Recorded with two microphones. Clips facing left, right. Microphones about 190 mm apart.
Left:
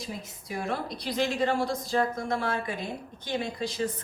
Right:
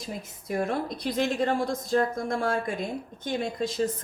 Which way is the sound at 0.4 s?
50° right (ahead or behind).